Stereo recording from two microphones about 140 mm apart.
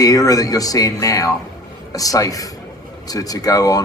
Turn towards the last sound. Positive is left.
turn(degrees=25)  # may be behind; listen again after turning